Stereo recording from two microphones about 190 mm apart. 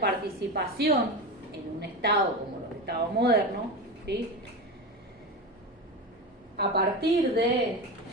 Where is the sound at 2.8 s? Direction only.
60° right (ahead or behind).